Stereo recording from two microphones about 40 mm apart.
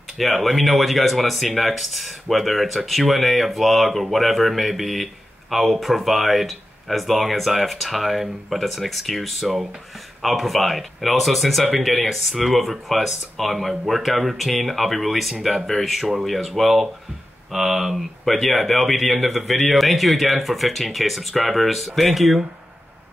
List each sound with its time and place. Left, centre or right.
0.2 s speech: centre